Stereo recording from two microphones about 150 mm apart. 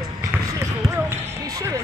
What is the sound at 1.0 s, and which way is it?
Music, 20° right (ahead or behind).